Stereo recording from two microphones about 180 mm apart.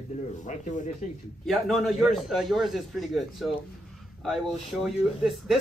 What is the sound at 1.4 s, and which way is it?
Speech, centre (ahead or behind).